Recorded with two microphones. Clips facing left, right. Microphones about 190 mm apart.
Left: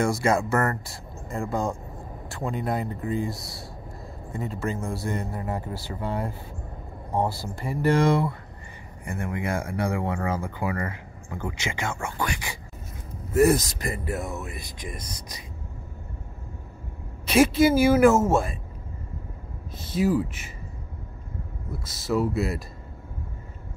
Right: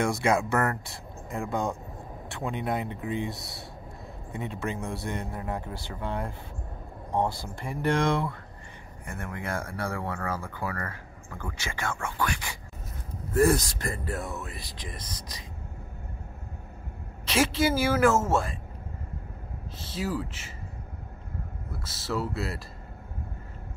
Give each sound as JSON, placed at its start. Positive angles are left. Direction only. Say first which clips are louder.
{"t": 0.0, "sound": "speech", "louder": "left 2 dB", "side_deg": 0}
{"t": 17.3, "sound": "speech", "louder": "left 6 dB", "side_deg": 15}
{"t": 19.8, "sound": "speech", "louder": "left 8 dB", "side_deg": 15}
{"t": 21.8, "sound": "speech", "louder": "left 6 dB", "side_deg": 15}